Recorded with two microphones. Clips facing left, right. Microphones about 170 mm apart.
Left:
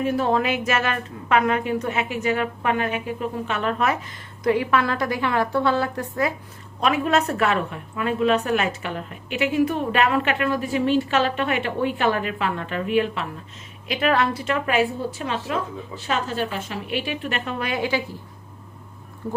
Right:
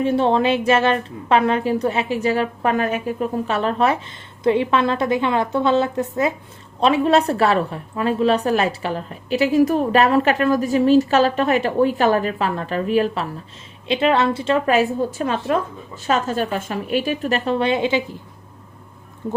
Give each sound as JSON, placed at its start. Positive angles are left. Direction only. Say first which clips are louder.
{"t": 0.0, "sound": "a woman's voice", "louder": "right 4 dB", "side_deg": -30}
{"t": 13.8, "sound": "a woman's voice", "louder": "right 4 dB", "side_deg": -25}
{"t": 19.2, "sound": "a woman's voice", "louder": "right 3 dB", "side_deg": -20}